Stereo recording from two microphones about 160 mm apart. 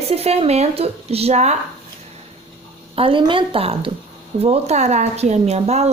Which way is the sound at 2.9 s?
35° right (ahead or behind).